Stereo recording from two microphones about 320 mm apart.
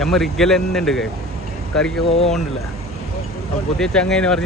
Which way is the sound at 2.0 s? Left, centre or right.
Centre.